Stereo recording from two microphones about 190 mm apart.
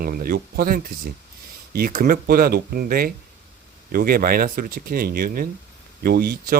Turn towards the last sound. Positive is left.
turn(degrees=-55)  # may be behind; listen again after turning